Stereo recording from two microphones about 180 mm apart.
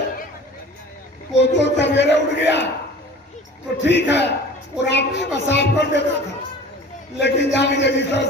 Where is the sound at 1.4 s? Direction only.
75° left (ahead or behind).